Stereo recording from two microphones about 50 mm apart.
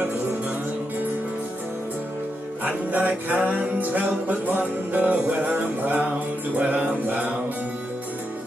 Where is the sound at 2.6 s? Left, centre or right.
Right.